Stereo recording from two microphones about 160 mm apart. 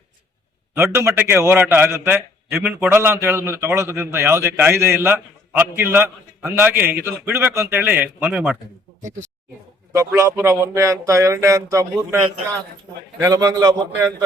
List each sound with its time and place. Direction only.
0.7 s a man's voice: 15° right (ahead or behind)
9.0 s a sound: 50° right (ahead or behind)
9.9 s speech: 20° right (ahead or behind)